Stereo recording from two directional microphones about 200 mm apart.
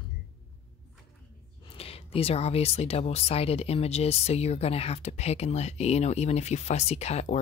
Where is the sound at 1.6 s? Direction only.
30° left (ahead or behind).